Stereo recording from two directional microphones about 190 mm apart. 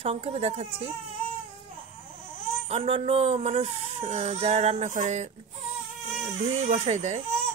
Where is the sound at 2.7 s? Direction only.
30° right (ahead or behind).